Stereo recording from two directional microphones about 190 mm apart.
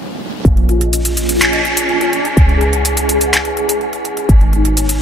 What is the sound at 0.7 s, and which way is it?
Music, centre (ahead or behind).